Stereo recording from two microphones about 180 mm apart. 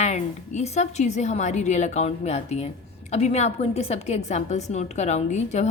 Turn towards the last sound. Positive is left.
turn(degrees=40)  # may be behind; listen again after turning